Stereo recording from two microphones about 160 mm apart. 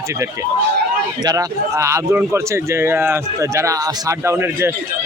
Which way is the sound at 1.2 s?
25° right (ahead or behind).